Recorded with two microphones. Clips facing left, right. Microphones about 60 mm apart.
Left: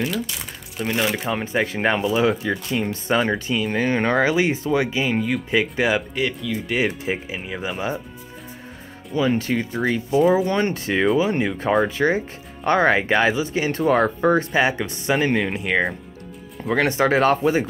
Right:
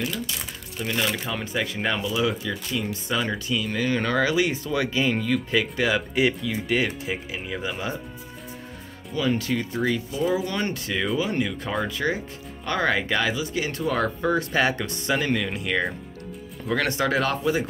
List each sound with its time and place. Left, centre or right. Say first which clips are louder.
0.8 s speech: left 4 dB; centre
1.3 s speech: left 5 dB; left
6.1 s speech: right 1 dB; centre
6.8 s speech: left 4 dB; left
9.1 s speech: left 4 dB; left
14.5 s speech: left 3 dB; centre; by 17.6 s left